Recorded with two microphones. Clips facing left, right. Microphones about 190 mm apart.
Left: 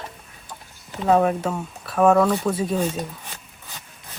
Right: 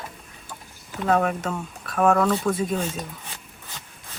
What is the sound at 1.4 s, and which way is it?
Speech, 10° left (ahead or behind).